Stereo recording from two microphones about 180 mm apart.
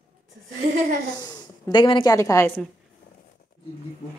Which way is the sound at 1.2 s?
25° left (ahead or behind).